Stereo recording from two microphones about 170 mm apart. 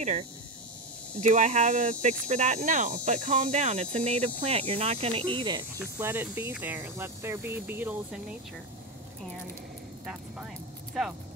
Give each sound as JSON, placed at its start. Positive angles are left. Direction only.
{"t": 0.0, "sound": "speech", "side_deg": -40}
{"t": 5.9, "sound": "speech", "side_deg": -10}
{"t": 11.0, "sound": "speech", "side_deg": 0}